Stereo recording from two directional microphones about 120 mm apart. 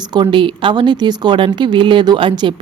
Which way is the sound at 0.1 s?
40° right (ahead or behind).